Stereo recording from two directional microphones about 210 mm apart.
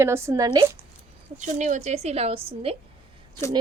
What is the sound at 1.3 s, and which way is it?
A woman's voice, 35° right (ahead or behind).